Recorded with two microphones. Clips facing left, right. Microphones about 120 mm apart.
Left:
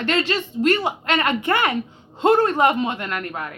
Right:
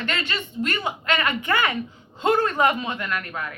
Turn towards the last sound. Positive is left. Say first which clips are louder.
# left 2 dB
turn(degrees=30)  # may be behind; listen again after turning